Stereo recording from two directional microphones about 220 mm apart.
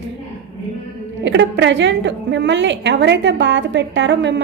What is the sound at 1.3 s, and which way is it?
A woman's voice, 55° right (ahead or behind).